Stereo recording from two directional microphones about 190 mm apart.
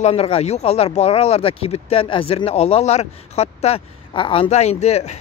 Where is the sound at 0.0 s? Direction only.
30° left (ahead or behind).